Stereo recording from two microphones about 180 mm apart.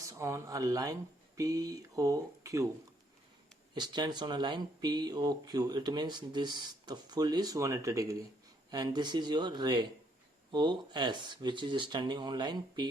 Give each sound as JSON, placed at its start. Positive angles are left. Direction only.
{"t": 0.0, "sound": "speech", "side_deg": -15}
{"t": 3.8, "sound": "speech", "side_deg": -25}